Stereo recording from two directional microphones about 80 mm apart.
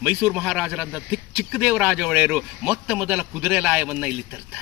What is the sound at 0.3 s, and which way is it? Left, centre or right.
A man's voice, centre.